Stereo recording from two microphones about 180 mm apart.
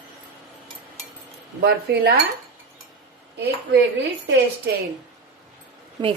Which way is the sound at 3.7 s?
75° right (ahead or behind).